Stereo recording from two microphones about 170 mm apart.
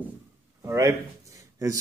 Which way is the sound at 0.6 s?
20° right (ahead or behind).